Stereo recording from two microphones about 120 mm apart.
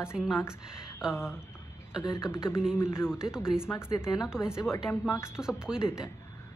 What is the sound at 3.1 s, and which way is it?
A woman's voice, 5° right (ahead or behind).